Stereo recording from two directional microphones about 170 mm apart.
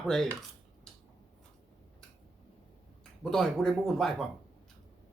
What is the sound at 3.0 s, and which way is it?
Speech, centre (ahead or behind).